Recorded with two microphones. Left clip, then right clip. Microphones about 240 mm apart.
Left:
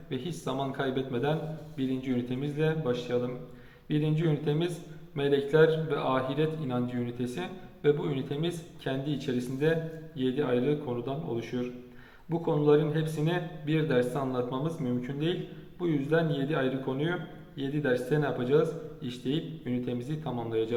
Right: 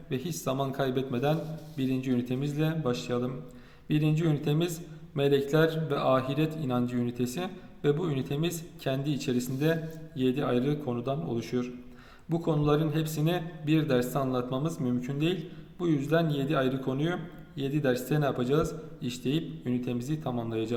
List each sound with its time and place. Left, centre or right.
0.1 s a man's voice: right